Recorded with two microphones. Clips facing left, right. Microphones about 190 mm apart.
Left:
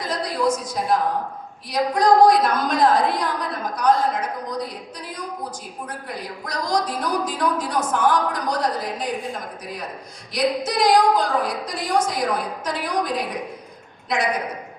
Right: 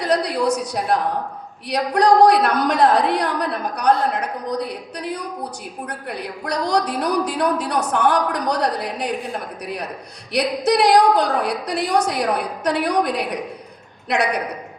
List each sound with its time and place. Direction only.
0.0 s a sound: 65° right (ahead or behind)
1.7 s a woman's voice: 65° right (ahead or behind)
10.3 s a woman's voice: 65° right (ahead or behind)